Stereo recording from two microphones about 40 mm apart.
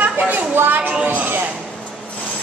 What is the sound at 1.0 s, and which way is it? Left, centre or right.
Speech, right.